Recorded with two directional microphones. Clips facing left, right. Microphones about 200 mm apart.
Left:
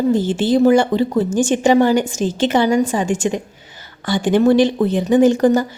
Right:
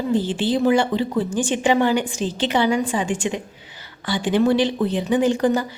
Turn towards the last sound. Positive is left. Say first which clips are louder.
# left 6 dB
turn(degrees=45)  # may be behind; listen again after turning